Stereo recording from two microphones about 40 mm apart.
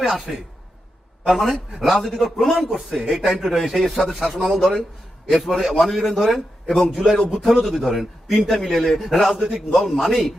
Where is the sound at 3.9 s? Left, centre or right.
Centre.